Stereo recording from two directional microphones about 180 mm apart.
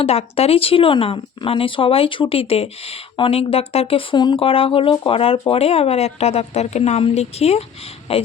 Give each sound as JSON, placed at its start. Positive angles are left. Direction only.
{"t": 0.0, "sound": "speech", "side_deg": 35}